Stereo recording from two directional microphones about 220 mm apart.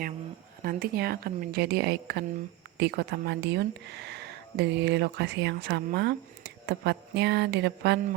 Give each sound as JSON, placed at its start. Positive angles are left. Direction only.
{"t": 0.6, "sound": "speech", "side_deg": -45}